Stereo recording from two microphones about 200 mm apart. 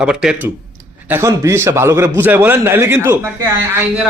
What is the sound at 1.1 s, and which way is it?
A man's voice, 15° right (ahead or behind).